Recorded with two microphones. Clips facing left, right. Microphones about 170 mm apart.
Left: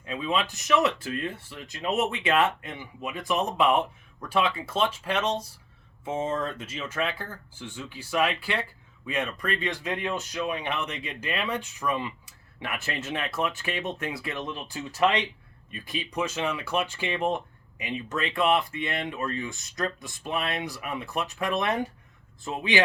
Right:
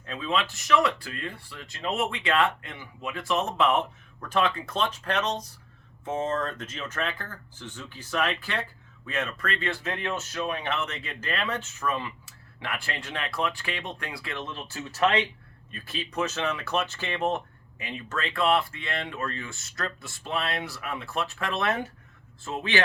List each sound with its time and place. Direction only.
0.0 s speech: 10° left (ahead or behind)